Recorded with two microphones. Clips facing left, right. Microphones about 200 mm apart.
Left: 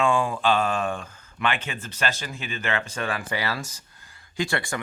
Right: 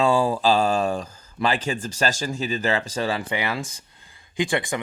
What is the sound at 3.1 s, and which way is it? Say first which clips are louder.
Speech: right 3 dB; 20° right (ahead or behind).